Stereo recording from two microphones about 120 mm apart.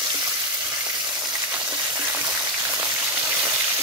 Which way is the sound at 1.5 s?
10° right (ahead or behind).